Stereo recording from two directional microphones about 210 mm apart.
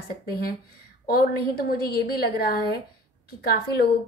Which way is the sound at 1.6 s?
45° left (ahead or behind).